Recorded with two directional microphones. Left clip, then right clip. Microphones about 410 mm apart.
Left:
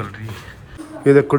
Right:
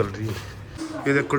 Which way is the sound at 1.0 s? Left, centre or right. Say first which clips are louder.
Left 9 dB; centre.